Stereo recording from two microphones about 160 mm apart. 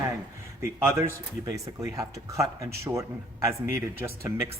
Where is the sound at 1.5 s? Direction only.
20° right (ahead or behind).